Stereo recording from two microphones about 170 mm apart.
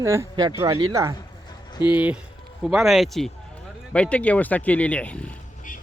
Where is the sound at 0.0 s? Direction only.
15° right (ahead or behind); by 5.4 s 5° left (ahead or behind).